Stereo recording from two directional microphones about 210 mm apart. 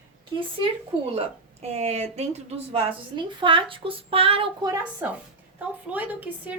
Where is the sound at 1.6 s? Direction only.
30° right (ahead or behind).